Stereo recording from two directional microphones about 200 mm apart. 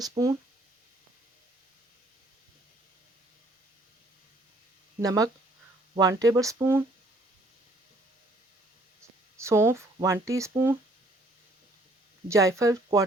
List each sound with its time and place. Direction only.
0.0 s speech: 20° right (ahead or behind)
4.9 s speech: 15° right (ahead or behind)
9.4 s speech: 15° right (ahead or behind)
12.3 s speech: 15° right (ahead or behind)